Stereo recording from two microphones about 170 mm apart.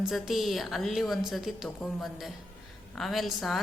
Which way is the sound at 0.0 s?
Centre (ahead or behind).